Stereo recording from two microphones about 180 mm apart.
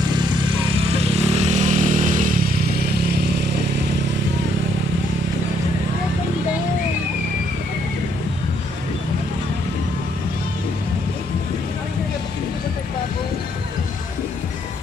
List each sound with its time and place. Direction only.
0.9 s motorcycle: 35° right (ahead or behind); by 2.8 s 50° right (ahead or behind)